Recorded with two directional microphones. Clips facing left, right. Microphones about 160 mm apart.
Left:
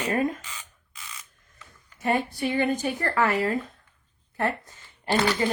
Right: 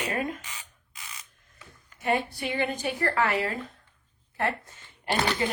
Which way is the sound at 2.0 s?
45° left (ahead or behind).